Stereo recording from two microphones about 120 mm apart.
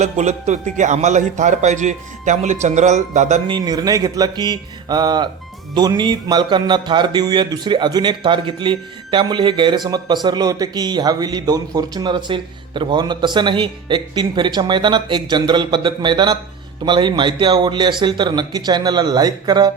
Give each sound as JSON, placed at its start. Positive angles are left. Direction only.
{"t": 0.0, "sound": "a man's voice", "side_deg": -75}
{"t": 3.4, "sound": "a man's voice", "side_deg": -35}